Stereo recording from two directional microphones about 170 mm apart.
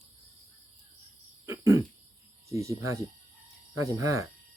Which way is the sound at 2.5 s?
15° right (ahead or behind).